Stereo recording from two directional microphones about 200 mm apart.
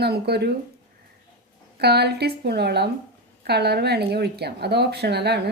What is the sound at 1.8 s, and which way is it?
Speech, 55° right (ahead or behind).